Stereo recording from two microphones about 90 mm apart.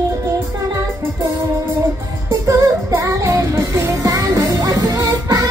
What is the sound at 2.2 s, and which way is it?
Music, 35° right (ahead or behind).